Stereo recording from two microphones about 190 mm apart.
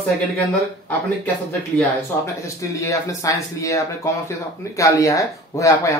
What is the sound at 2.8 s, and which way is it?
Speech, 15° left (ahead or behind).